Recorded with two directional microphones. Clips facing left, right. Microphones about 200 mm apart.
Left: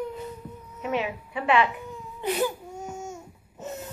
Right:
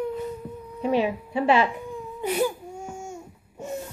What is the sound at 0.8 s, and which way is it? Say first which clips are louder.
Speech: right 5 dB; 35° right (ahead or behind).